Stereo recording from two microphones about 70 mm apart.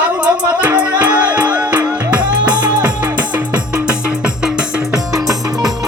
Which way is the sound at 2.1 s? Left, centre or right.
Right.